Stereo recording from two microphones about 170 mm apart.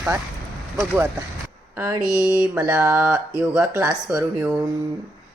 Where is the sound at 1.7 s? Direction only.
10° right (ahead or behind).